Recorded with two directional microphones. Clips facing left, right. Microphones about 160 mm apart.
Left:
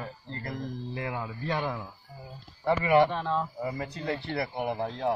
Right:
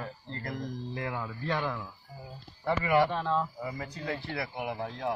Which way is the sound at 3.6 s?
30° left (ahead or behind).